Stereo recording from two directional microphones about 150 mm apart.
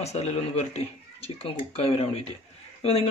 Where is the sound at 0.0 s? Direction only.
45° left (ahead or behind).